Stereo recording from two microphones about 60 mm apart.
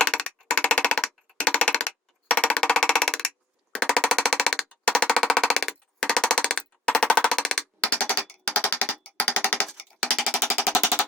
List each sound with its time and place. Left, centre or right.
0.0 s music: centre
7.8 s a sound: left
8.2 s music: centre
8.6 s music: left
10.1 s machine gun: centre